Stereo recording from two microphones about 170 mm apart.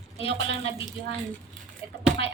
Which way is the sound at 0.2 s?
35° left (ahead or behind).